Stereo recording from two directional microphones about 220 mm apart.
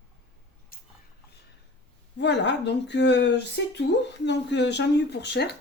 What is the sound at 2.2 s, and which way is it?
Speech, 50° left (ahead or behind).